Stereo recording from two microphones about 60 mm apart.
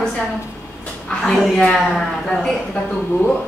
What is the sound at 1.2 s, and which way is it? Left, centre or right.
Speech, centre.